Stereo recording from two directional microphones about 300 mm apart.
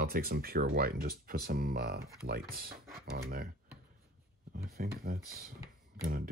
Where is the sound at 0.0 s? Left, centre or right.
Right.